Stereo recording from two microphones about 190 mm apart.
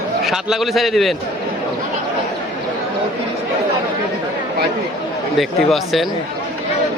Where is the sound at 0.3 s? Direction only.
Centre (ahead or behind).